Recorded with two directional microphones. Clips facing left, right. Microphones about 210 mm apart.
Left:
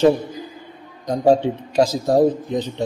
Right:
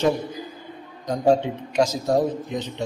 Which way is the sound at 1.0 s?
35° left (ahead or behind).